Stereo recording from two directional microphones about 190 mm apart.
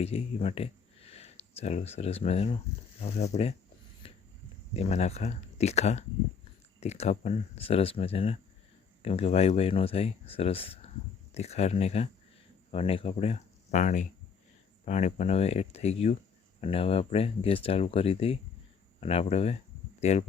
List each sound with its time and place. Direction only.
0.0 s speech: 30° left (ahead or behind)
4.0 s a sound: 30° left (ahead or behind)
4.7 s speech: 35° left (ahead or behind)